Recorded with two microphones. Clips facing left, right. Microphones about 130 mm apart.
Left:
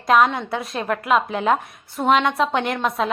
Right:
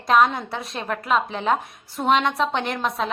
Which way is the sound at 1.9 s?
Centre (ahead or behind).